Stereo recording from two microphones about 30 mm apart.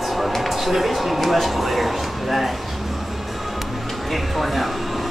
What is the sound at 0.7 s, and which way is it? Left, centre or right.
Speech, centre.